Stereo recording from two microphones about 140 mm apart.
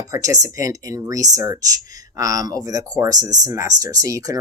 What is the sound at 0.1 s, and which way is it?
Speech, 25° right (ahead or behind).